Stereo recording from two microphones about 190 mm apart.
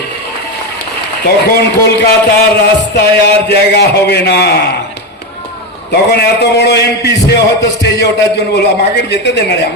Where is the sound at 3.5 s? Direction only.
60° left (ahead or behind).